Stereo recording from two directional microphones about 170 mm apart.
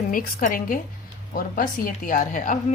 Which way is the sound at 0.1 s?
55° left (ahead or behind).